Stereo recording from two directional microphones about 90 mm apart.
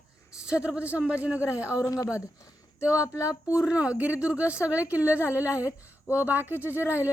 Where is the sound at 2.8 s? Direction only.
10° right (ahead or behind).